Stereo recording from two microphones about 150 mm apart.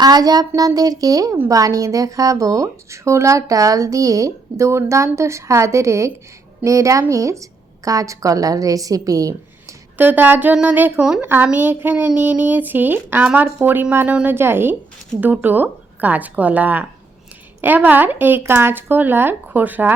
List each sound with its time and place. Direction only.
0.0 s a woman's voice: 25° right (ahead or behind)